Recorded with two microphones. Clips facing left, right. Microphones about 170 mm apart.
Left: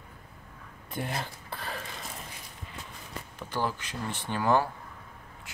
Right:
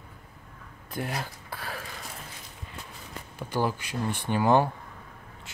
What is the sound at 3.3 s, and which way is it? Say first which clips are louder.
Speech: right 4 dB; 10° right (ahead or behind).